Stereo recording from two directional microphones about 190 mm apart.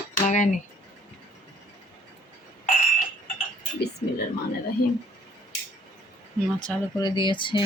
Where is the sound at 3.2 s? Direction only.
50° left (ahead or behind).